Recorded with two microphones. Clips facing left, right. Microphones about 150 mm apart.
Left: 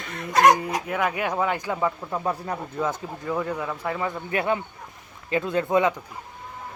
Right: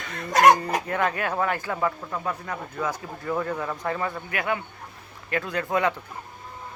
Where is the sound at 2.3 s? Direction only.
30° left (ahead or behind).